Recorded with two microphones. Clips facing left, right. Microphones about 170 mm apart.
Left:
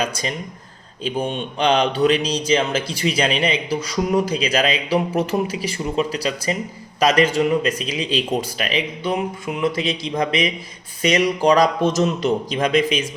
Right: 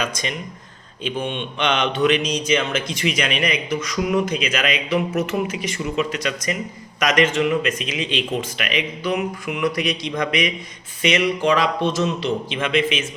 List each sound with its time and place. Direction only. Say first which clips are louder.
0.0 s speech: left 2 dB; 35° left (ahead or behind)